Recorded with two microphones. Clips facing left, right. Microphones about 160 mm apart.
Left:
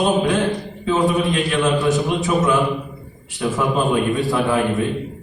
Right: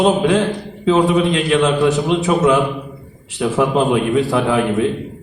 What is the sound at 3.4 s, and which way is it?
A man's voice, 80° right.